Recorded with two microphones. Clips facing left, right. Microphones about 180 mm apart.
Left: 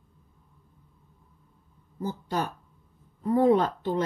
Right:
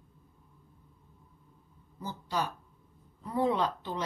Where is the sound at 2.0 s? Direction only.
50° left (ahead or behind).